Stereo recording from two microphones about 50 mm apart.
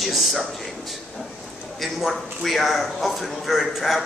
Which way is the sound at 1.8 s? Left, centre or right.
Centre.